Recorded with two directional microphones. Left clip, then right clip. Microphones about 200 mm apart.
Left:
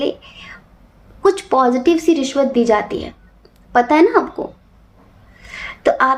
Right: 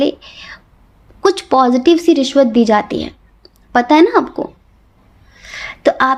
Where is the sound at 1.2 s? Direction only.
45° right (ahead or behind).